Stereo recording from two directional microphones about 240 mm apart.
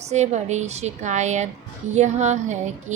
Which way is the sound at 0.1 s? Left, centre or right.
Right.